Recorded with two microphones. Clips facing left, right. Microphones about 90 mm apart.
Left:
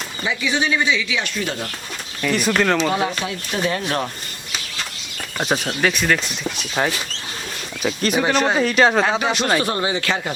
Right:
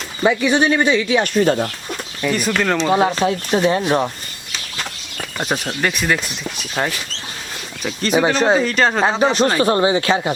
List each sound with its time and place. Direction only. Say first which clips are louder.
0.2 s speech: right 7 dB; 55° right (ahead or behind)
2.2 s speech: even; centre (ahead or behind)
2.9 s speech: right 6 dB; 30° right (ahead or behind)
5.4 s speech: left 1 dB; centre (ahead or behind)
9.6 s speech: right 6 dB; 30° right (ahead or behind)